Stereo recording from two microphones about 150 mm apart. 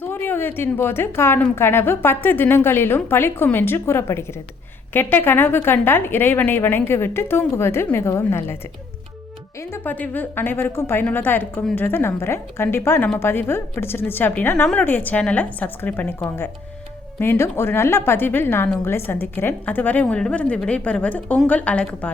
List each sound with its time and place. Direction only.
0.1 s a woman's voice: 15° left (ahead or behind)
9.6 s a woman's voice: 15° left (ahead or behind)